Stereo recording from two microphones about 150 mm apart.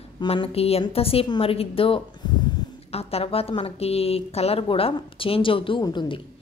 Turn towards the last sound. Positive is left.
turn(degrees=35)  # may be behind; listen again after turning